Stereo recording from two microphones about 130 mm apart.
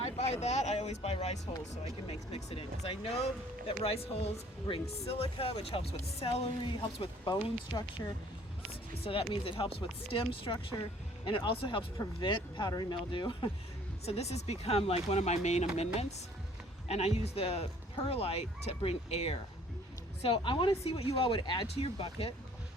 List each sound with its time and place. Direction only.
0.0 s vehicle: 55° left (ahead or behind)
1.7 s speech: 55° left (ahead or behind)
8.0 s speech: 20° left (ahead or behind)
9.3 s speech: 40° left (ahead or behind)
14.0 s speech: 55° left (ahead or behind)